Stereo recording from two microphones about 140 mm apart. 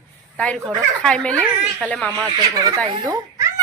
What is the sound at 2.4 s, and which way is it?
Speech, 25° right (ahead or behind).